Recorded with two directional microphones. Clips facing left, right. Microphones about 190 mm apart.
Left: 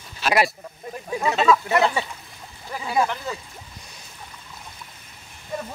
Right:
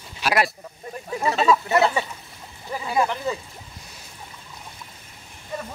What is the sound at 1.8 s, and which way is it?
Speech, centre (ahead or behind).